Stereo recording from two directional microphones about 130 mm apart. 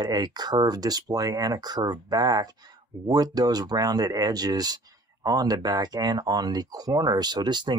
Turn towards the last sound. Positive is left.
turn(degrees=-35)  # may be behind; listen again after turning